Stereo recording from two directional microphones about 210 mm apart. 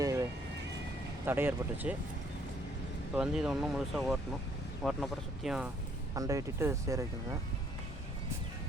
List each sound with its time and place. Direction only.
0.0 s vehicle: 15° right (ahead or behind)
1.2 s speech: 10° right (ahead or behind)
3.2 s speech: 5° right (ahead or behind)
6.1 s speech: 15° right (ahead or behind)